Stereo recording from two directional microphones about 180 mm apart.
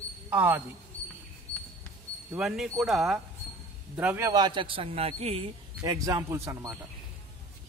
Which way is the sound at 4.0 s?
10° right (ahead or behind).